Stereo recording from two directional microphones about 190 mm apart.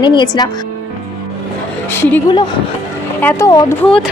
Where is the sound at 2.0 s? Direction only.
10° left (ahead or behind).